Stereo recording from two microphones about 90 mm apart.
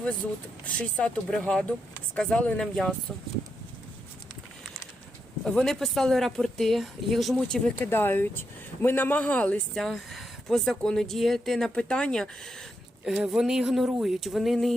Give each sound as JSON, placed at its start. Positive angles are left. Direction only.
{"t": 0.6, "sound": "speech", "side_deg": 10}
{"t": 5.5, "sound": "speech", "side_deg": 5}
{"t": 7.8, "sound": "speech", "side_deg": 25}
{"t": 9.7, "sound": "speech", "side_deg": 5}
{"t": 13.1, "sound": "speech", "side_deg": -10}